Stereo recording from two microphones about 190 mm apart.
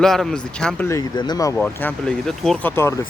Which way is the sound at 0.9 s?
20° left (ahead or behind).